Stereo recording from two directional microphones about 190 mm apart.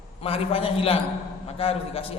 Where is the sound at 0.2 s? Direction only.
30° left (ahead or behind).